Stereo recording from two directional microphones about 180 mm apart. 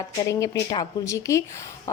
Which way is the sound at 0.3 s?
20° left (ahead or behind).